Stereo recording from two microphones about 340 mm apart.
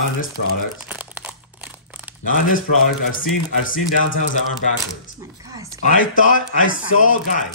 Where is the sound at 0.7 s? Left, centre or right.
Centre.